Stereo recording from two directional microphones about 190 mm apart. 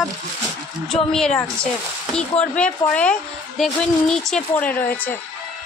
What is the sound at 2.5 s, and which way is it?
Speech, 5° left (ahead or behind).